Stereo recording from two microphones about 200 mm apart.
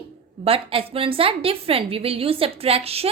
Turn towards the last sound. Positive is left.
turn(degrees=-30)  # may be behind; listen again after turning